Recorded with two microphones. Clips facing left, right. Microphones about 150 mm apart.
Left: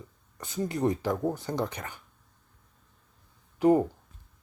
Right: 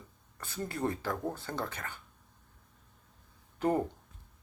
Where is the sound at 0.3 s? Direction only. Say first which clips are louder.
Left 6 dB; 15° left (ahead or behind).